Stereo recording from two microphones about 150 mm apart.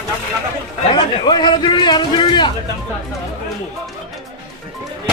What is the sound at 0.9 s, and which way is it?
A man's voice, 30° left (ahead or behind).